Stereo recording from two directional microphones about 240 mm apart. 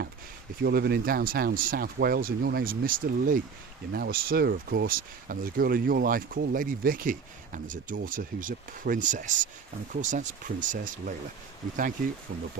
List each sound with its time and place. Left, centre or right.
0.6 s speech: right